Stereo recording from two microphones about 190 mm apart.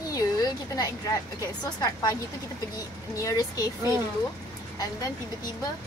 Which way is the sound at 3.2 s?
20° left (ahead or behind).